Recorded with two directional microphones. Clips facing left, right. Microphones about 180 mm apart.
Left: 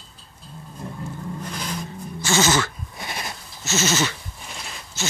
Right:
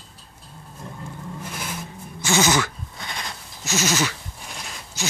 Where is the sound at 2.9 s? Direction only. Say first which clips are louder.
Left 4 dB; 20° left (ahead or behind).